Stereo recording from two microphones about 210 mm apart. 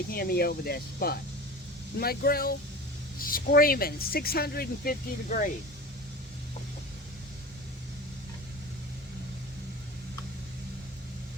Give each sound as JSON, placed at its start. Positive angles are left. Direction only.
{"t": 0.1, "sound": "speech", "side_deg": 45}